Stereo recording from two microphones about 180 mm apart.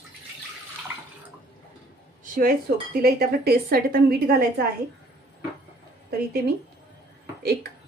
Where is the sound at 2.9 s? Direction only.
60° right (ahead or behind).